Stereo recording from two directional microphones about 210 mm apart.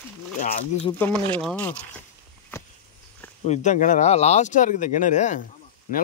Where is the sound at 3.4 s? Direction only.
35° left (ahead or behind).